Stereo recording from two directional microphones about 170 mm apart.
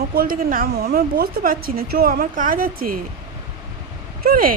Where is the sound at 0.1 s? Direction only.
60° right (ahead or behind).